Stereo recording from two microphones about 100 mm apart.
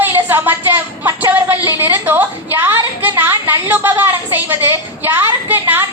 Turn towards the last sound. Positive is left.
turn(degrees=-25)  # may be behind; listen again after turning